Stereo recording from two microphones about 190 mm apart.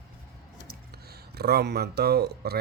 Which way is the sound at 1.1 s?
55° right (ahead or behind).